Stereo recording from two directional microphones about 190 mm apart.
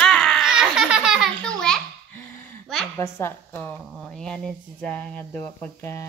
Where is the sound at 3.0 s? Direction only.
15° left (ahead or behind).